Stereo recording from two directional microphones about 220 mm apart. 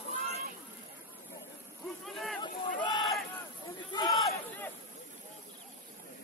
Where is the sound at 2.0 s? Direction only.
Centre (ahead or behind).